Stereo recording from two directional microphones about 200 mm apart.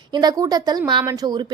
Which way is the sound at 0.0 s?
20° right (ahead or behind).